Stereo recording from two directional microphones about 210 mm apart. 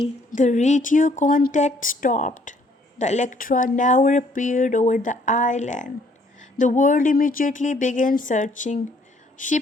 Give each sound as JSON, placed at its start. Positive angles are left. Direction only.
{"t": 0.0, "sound": "speech", "side_deg": 35}